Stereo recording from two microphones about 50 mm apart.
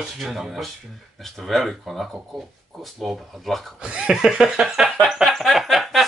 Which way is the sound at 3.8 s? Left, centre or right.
Right.